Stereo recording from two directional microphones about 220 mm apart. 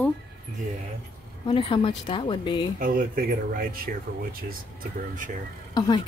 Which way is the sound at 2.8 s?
40° right (ahead or behind).